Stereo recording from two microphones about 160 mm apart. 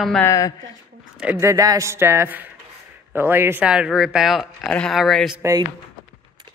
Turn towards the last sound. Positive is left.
turn(degrees=-20)  # may be behind; listen again after turning